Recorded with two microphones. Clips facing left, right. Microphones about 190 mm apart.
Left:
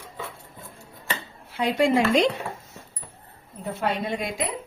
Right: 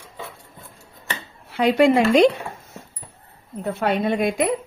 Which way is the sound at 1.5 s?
65° right (ahead or behind).